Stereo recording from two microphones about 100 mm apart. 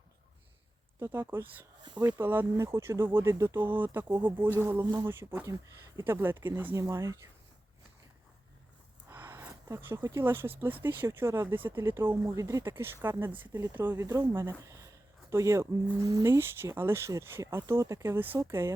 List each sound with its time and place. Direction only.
1.1 s speech: 20° right (ahead or behind)
6.7 s speech: 30° right (ahead or behind)
9.0 s speech: 20° right (ahead or behind)
12.2 s speech: 35° right (ahead or behind)
12.6 s speech: 25° right (ahead or behind)
14.0 s speech: 30° right (ahead or behind)